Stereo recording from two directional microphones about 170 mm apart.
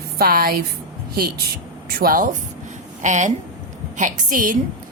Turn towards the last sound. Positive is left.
turn(degrees=-55)  # may be behind; listen again after turning